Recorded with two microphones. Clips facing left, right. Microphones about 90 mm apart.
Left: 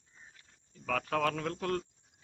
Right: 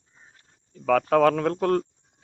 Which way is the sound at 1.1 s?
85° right.